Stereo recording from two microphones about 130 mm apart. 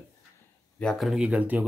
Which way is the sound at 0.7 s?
5° left (ahead or behind).